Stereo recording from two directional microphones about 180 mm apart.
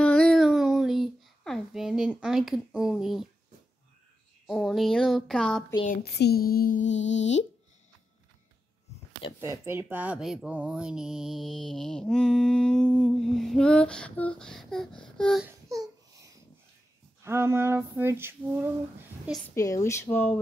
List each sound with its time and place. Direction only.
0.0 s a sound: 5° left (ahead or behind)
4.5 s speech: centre (ahead or behind)
5.9 s child singing: 60° left (ahead or behind)
6.8 s music: 90° left
9.4 s speech: 15° right (ahead or behind); by 15.4 s 5° left (ahead or behind)
15.4 s a sound: 20° right (ahead or behind)
19.5 s speech: 15° left (ahead or behind)